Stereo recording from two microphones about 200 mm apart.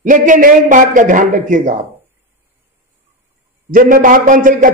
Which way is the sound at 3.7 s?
45° right (ahead or behind).